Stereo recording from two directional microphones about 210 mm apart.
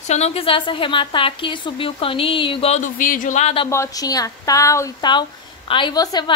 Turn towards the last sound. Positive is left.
turn(degrees=20)  # may be behind; listen again after turning